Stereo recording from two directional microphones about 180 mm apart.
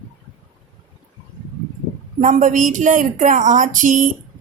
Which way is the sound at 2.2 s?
45° right (ahead or behind).